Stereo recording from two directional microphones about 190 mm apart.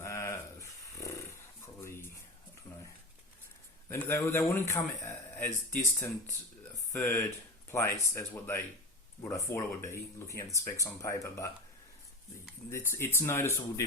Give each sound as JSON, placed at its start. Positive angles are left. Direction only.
{"t": 0.0, "sound": "a sound", "side_deg": 15}
{"t": 3.8, "sound": "a man's voice", "side_deg": 10}
{"t": 12.7, "sound": "a man's voice", "side_deg": 15}